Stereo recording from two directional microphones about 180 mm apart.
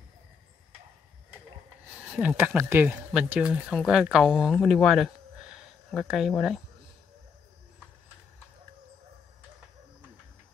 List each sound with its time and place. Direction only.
2.0 s speech: 5° right (ahead or behind)